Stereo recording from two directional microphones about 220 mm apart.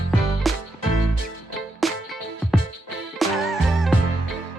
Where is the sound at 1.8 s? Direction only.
Centre (ahead or behind).